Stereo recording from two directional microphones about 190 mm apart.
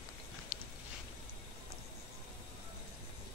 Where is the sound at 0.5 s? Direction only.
Centre (ahead or behind).